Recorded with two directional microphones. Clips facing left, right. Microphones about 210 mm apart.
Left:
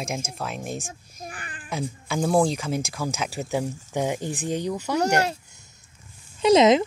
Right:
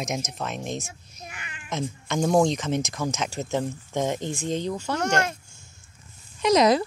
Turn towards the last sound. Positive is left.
turn(degrees=25)  # may be behind; listen again after turning